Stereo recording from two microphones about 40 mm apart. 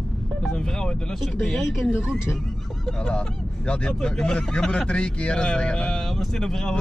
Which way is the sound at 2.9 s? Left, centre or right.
Left.